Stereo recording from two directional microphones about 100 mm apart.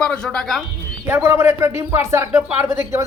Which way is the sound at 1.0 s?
25° right (ahead or behind).